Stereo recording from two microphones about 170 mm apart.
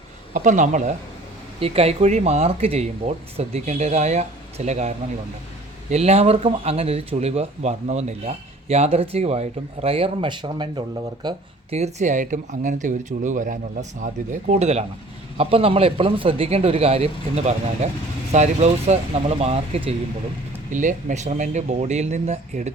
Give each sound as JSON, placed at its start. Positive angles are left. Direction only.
{"t": 0.3, "sound": "speech", "side_deg": -45}
{"t": 1.5, "sound": "speech", "side_deg": -35}
{"t": 11.7, "sound": "speech", "side_deg": -40}
{"t": 20.7, "sound": "speech", "side_deg": -45}